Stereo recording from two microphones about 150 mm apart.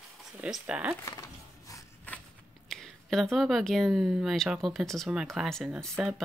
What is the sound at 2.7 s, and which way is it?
Speech, centre (ahead or behind).